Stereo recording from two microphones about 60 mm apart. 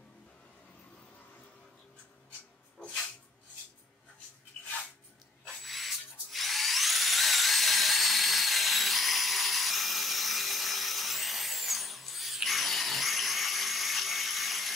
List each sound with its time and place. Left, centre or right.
5.6 s music: centre